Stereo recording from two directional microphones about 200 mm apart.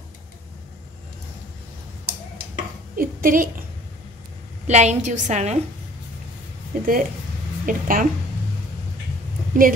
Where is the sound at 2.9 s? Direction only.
45° right (ahead or behind).